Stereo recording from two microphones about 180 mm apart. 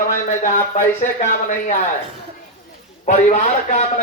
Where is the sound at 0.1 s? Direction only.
45° left (ahead or behind).